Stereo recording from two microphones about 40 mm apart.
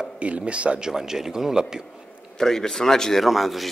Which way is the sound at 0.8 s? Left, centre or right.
Centre.